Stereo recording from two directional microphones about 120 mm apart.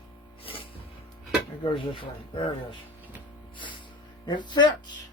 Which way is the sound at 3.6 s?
40° left (ahead or behind).